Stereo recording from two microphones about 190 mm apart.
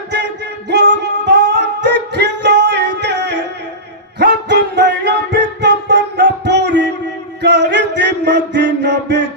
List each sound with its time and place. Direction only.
0.1 s singing: 65° right (ahead or behind)
4.2 s music: 65° right (ahead or behind)